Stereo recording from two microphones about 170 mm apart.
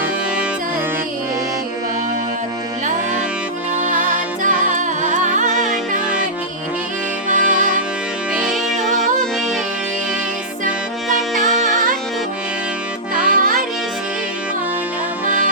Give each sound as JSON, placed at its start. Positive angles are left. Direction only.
{"t": 4.4, "sound": "music", "side_deg": -45}
{"t": 7.3, "sound": "music", "side_deg": -50}
{"t": 8.3, "sound": "music", "side_deg": -5}
{"t": 10.7, "sound": "music", "side_deg": 0}
{"t": 11.5, "sound": "music", "side_deg": -50}
{"t": 13.1, "sound": "music", "side_deg": -55}